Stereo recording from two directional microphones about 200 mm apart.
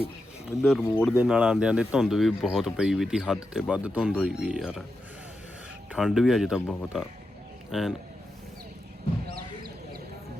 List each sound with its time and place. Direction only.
0.8 s speech: 10° left (ahead or behind)
1.1 s speech: 5° right (ahead or behind)
5.9 s speech: centre (ahead or behind)
9.3 s a sound: 50° right (ahead or behind)